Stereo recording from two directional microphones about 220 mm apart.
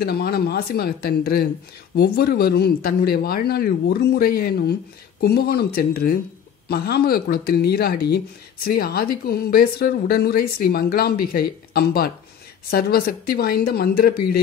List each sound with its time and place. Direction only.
0.0 s speech: 45° left (ahead or behind)